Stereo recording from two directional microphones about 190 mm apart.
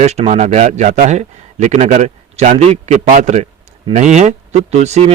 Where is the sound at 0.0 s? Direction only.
35° right (ahead or behind).